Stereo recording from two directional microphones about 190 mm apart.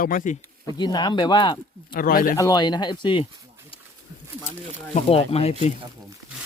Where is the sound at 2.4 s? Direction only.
20° left (ahead or behind).